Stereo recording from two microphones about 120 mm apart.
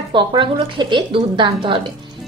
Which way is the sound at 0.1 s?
40° right (ahead or behind).